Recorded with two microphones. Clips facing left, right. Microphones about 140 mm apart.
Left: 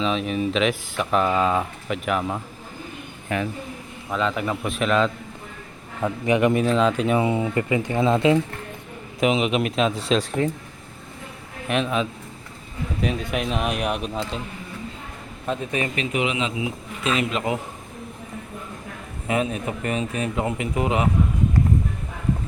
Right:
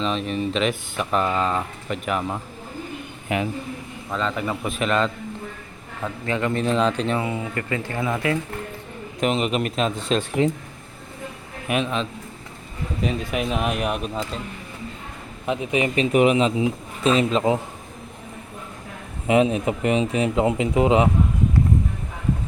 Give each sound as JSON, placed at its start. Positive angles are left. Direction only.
{"t": 0.0, "sound": "speech", "side_deg": 0}
{"t": 3.2, "sound": "a man's voice", "side_deg": -15}
{"t": 4.1, "sound": "speech", "side_deg": 5}
{"t": 6.0, "sound": "a man's voice", "side_deg": 15}
{"t": 6.7, "sound": "speech", "side_deg": 5}
{"t": 7.2, "sound": "speech", "side_deg": 20}
{"t": 9.2, "sound": "speech", "side_deg": 0}
{"t": 11.7, "sound": "speech", "side_deg": 0}
{"t": 15.4, "sound": "speech", "side_deg": -15}
{"t": 16.0, "sound": "speech", "side_deg": -45}
{"t": 19.3, "sound": "speech", "side_deg": -25}